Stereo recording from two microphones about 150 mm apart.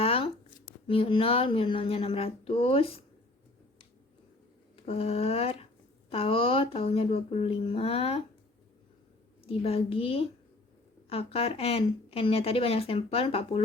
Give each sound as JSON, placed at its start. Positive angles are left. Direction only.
{"t": 0.0, "sound": "speech", "side_deg": 40}
{"t": 4.9, "sound": "a woman's voice", "side_deg": 40}
{"t": 9.5, "sound": "a woman's voice", "side_deg": 40}